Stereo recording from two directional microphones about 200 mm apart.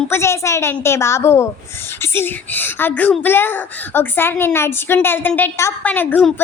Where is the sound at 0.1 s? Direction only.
15° left (ahead or behind).